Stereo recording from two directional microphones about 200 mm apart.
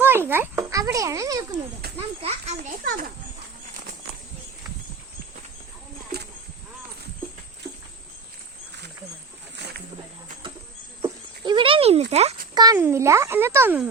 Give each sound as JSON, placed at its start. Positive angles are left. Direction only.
{"t": 0.0, "sound": "a child's voice", "side_deg": -10}
{"t": 1.8, "sound": "children playing", "side_deg": -50}
{"t": 2.6, "sound": "a child's voice", "side_deg": -45}
{"t": 9.6, "sound": "wild animals", "side_deg": -55}
{"t": 11.0, "sound": "goat", "side_deg": -25}
{"t": 12.1, "sound": "a child's voice", "side_deg": -30}
{"t": 12.5, "sound": "a child's voice", "side_deg": -15}